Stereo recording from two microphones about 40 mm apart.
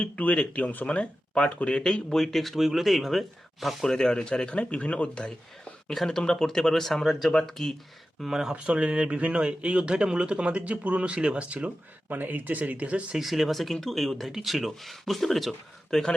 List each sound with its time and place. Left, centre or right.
0.3 s speech: left
1.3 s speech: left
2.2 s speech: centre
3.8 s speech: centre
6.1 s speech: centre
8.3 s speech: centre
8.5 s speech: right
12.0 s speech: right
13.1 s speech: centre